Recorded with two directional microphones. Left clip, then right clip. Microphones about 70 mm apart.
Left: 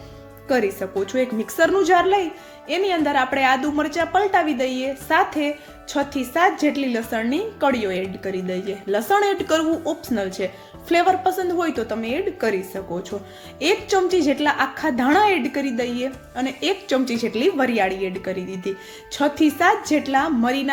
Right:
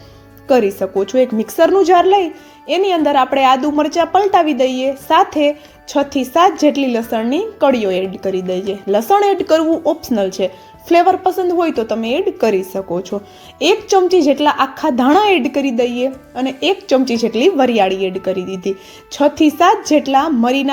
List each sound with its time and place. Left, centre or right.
0.4 s speech: right
0.8 s a woman's voice: right
11.6 s a woman's voice: right
17.2 s a woman's voice: right